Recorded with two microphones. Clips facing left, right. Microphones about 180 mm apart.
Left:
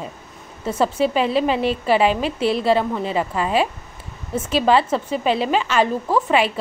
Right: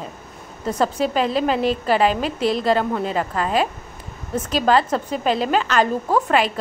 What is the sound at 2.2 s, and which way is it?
Speech, 40° right (ahead or behind).